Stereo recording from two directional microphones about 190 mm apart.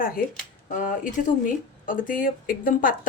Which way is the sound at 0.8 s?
45° left (ahead or behind).